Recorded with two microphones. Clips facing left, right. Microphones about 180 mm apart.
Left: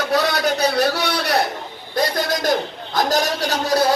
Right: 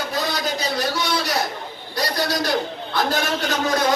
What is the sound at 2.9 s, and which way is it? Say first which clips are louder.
Speech: left 3 dB; 40° left (ahead or behind).